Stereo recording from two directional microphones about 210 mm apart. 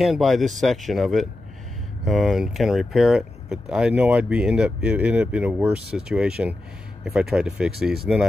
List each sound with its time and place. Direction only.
0.0 s speech: centre (ahead or behind)